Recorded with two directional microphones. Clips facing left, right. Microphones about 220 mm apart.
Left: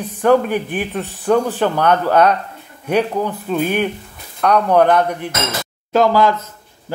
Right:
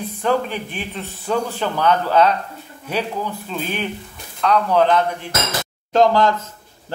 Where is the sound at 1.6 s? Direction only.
55° left (ahead or behind).